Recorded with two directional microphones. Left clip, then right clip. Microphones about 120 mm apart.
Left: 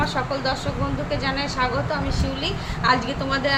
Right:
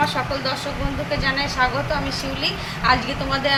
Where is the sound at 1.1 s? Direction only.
50° left (ahead or behind).